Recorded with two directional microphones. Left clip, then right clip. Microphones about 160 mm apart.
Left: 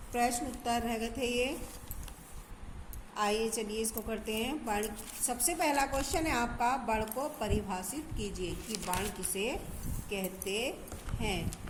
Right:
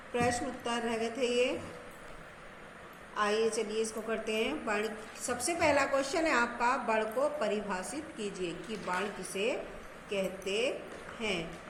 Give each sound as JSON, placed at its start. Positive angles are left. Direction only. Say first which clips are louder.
{"t": 0.1, "sound": "a woman's voice", "louder": "right 1 dB", "side_deg": 40}
{"t": 3.2, "sound": "a woman's voice", "louder": "right 2 dB", "side_deg": 45}